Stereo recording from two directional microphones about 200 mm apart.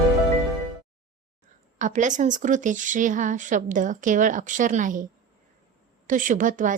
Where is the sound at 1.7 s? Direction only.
40° right (ahead or behind).